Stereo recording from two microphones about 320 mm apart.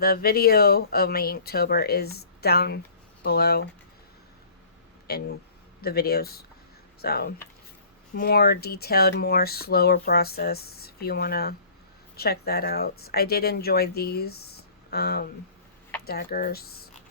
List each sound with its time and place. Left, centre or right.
0.0 s speech: left
5.1 s speech: left